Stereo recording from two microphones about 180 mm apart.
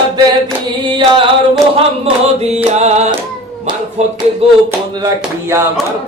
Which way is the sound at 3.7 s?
25° right (ahead or behind).